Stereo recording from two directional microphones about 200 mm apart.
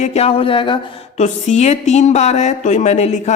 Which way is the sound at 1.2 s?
35° left (ahead or behind).